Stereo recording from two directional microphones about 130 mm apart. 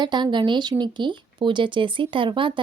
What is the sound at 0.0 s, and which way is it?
Speech, 35° right (ahead or behind).